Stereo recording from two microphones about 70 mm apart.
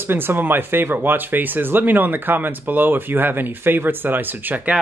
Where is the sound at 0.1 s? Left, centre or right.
Right.